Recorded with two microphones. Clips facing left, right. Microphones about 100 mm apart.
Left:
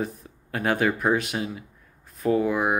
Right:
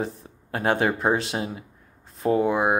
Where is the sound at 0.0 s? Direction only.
30° right (ahead or behind).